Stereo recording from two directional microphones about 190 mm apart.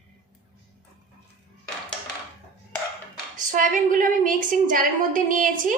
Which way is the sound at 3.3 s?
40° right (ahead or behind).